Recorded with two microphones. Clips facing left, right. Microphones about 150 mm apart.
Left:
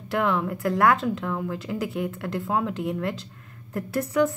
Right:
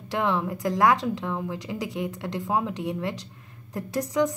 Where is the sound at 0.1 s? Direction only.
20° right (ahead or behind).